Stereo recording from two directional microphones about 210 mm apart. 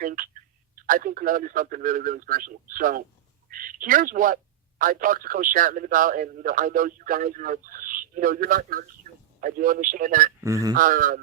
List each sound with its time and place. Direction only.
0.0 s telephone: 40° right (ahead or behind)
0.8 s a man's voice: 40° right (ahead or behind)
10.4 s speech: 15° right (ahead or behind)
10.8 s a man's voice: 40° right (ahead or behind)